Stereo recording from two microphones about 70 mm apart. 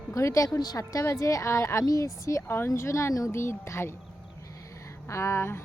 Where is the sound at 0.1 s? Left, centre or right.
Left.